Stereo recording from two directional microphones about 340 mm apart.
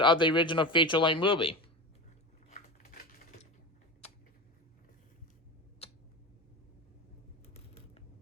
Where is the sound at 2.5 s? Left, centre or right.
Left.